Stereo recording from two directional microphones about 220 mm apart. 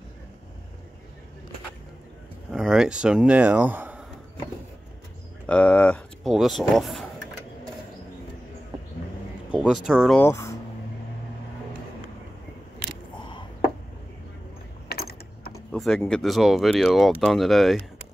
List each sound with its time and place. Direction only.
2.5 s speech: centre (ahead or behind)
5.5 s speech: 5° left (ahead or behind)
9.5 s speech: centre (ahead or behind)
10.1 s speech: 10° left (ahead or behind)
14.9 s a sound: 45° left (ahead or behind)
15.5 s a sound: 5° left (ahead or behind)
16.0 s speech: centre (ahead or behind)